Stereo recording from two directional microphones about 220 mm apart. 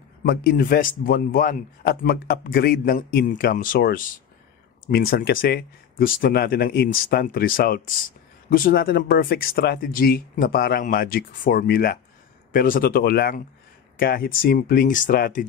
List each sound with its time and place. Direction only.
0.2 s a man's voice: 45° left (ahead or behind)